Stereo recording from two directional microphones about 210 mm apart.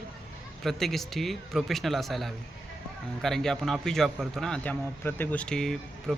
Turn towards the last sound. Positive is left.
turn(degrees=0)  # may be behind; listen again after turning